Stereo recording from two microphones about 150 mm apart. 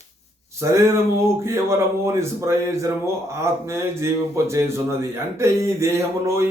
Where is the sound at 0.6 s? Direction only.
20° right (ahead or behind).